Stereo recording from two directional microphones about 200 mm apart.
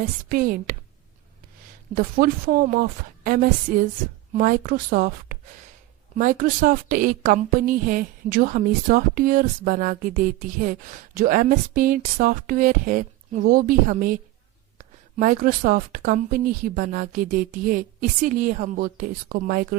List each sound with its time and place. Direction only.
0.3 s a woman's voice: 45° right (ahead or behind)
2.0 s a woman's voice: 45° right (ahead or behind)